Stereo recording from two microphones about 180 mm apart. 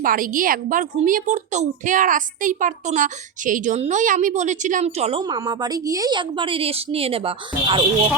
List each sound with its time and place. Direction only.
0.0 s a woman's voice: 50° right (ahead or behind); by 5.2 s 35° right (ahead or behind)
5.2 s a woman's voice: 20° right (ahead or behind)